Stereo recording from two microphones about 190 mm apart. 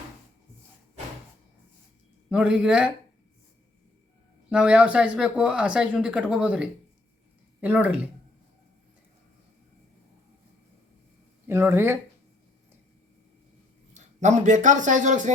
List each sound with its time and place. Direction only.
2.3 s speech: 5° right (ahead or behind)
4.4 s speech: 5° right (ahead or behind)
11.4 s speech: 10° right (ahead or behind)
13.9 s speech: 40° right (ahead or behind)